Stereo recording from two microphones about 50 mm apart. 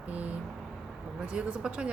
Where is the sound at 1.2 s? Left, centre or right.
Right.